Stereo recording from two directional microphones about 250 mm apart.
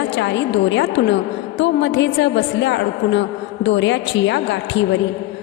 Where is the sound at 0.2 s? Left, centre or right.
Left.